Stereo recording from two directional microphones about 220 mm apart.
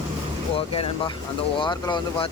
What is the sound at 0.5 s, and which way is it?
Speech, 25° left (ahead or behind).